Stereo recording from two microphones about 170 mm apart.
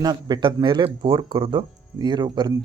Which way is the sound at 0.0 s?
25° right (ahead or behind).